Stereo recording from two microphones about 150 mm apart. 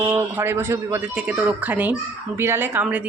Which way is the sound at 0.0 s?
15° right (ahead or behind).